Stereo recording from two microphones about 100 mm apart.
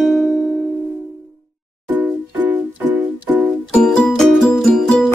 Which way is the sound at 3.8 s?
5° left (ahead or behind).